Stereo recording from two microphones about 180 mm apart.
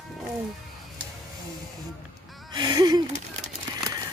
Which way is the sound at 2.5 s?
25° right (ahead or behind).